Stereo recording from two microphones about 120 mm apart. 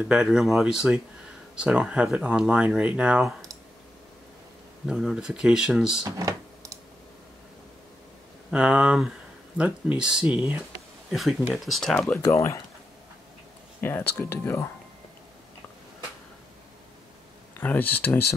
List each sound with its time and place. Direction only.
0.0 s speech: 5° right (ahead or behind)
4.8 s speech: 5° right (ahead or behind)
6.0 s a sound: 25° right (ahead or behind)
8.5 s speech: 10° right (ahead or behind)
12.2 s speech: 25° left (ahead or behind)
13.7 s speech: 20° left (ahead or behind)
17.6 s speech: 15° left (ahead or behind)